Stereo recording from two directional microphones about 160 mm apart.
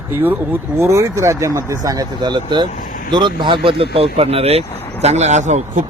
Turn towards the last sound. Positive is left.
turn(degrees=-45)  # may be behind; listen again after turning